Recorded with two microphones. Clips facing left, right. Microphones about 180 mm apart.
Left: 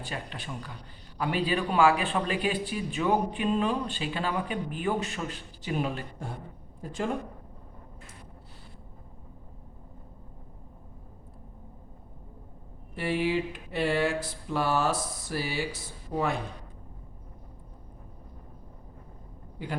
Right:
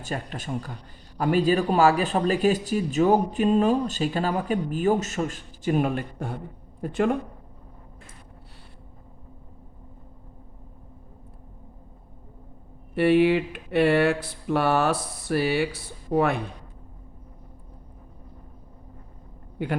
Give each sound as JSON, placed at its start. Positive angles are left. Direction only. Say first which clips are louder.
{"t": 0.0, "sound": "speech", "louder": "right 5 dB", "side_deg": -45}
{"t": 12.9, "sound": "speech", "louder": "right 9 dB", "side_deg": -65}